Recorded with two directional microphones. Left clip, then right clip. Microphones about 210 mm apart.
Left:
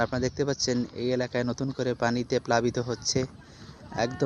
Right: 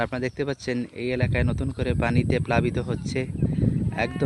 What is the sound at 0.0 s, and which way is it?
Speech, 20° right (ahead or behind).